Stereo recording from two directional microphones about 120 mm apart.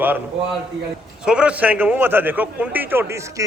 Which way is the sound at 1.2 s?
10° right (ahead or behind).